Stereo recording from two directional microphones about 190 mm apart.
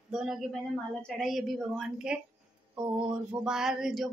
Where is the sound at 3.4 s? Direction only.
5° right (ahead or behind).